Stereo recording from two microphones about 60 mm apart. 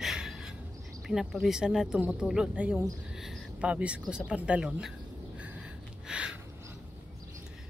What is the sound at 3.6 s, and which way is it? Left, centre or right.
Speech, right.